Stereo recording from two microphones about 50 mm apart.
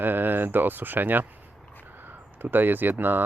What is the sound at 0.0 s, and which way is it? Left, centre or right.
Speech, right.